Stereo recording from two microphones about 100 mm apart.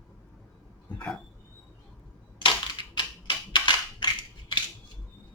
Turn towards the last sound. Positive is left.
turn(degrees=50)  # may be behind; listen again after turning